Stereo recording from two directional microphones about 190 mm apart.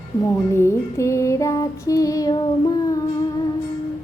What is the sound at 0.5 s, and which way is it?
Child singing, 15° left (ahead or behind).